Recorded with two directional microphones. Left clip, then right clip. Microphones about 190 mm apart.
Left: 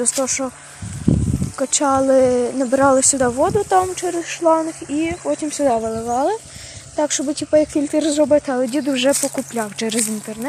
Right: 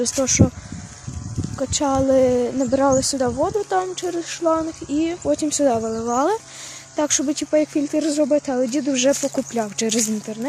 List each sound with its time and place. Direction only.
0.0 s speech: 20° right (ahead or behind)
1.5 s speech: 5° right (ahead or behind)
4.9 s speech: 15° right (ahead or behind)
7.5 s speech: 5° right (ahead or behind)